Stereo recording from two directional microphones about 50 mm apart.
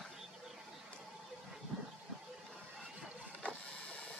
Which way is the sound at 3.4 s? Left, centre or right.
Left.